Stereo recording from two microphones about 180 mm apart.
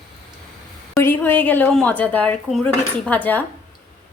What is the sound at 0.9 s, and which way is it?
Speech, 10° left (ahead or behind).